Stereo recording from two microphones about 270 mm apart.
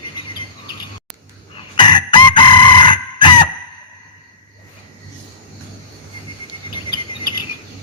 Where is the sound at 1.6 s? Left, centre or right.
Centre.